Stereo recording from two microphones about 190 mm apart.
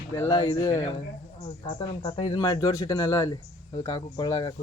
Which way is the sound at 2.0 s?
30° left (ahead or behind).